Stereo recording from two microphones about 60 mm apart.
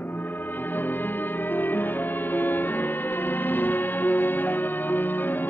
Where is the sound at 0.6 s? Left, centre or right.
Left.